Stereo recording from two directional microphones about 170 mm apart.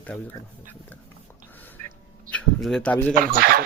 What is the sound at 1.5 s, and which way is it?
Duck, 10° left (ahead or behind).